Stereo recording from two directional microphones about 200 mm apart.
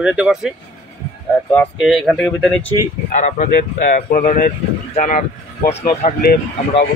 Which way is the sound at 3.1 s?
35° left (ahead or behind).